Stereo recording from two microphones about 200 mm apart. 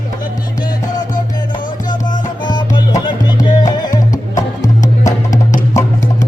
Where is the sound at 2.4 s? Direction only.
20° left (ahead or behind).